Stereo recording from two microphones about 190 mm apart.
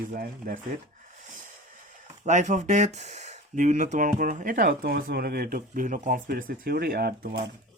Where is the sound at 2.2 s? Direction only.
40° right (ahead or behind).